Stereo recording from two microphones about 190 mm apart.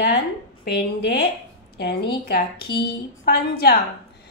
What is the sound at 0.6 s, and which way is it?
A woman's voice, 60° left (ahead or behind).